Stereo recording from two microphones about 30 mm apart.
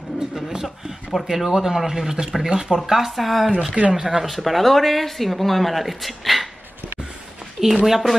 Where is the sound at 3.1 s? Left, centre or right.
Centre.